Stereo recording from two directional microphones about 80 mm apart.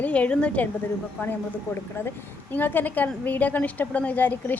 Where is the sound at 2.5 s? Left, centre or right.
Left.